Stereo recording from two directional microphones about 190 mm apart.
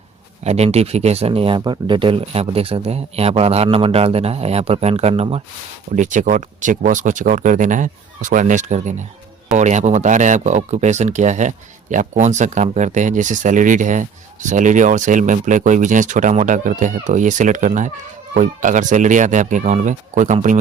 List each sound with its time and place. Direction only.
0.4 s speech: 35° right (ahead or behind)
6.0 s speech: 40° right (ahead or behind)